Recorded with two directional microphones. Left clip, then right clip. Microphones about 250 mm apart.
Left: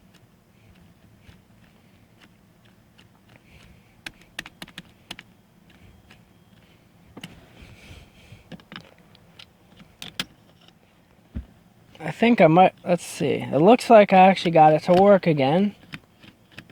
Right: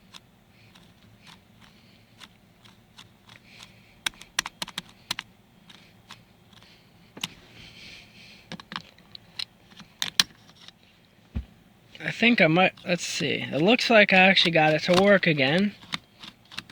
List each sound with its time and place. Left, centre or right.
4.0 s computer keyboard: centre
7.6 s vehicle: centre
8.4 s computer keyboard: centre
11.9 s speech: centre
15.9 s a sound: centre